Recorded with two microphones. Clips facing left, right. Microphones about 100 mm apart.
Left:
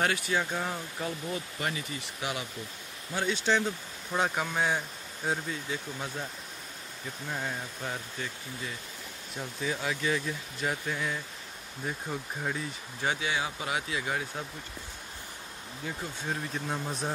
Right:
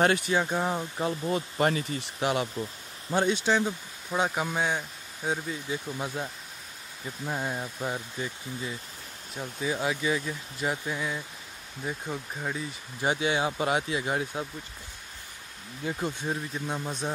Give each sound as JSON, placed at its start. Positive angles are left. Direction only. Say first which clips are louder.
{"t": 0.0, "sound": "speech", "louder": "right 5 dB", "side_deg": -30}
{"t": 1.3, "sound": "speech", "louder": "right 8 dB", "side_deg": -40}
{"t": 3.1, "sound": "speech", "louder": "right 6 dB", "side_deg": -25}
{"t": 3.4, "sound": "speech", "louder": "right 2 dB", "side_deg": -10}
{"t": 5.7, "sound": "speech", "louder": "right 3 dB", "side_deg": -15}
{"t": 7.2, "sound": "speech", "louder": "right 4 dB", "side_deg": -20}
{"t": 13.0, "sound": "speech", "louder": "right 5 dB", "side_deg": -20}
{"t": 16.3, "sound": "speech", "louder": "right 2 dB", "side_deg": 0}